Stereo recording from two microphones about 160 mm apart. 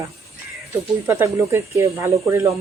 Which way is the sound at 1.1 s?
20° right (ahead or behind).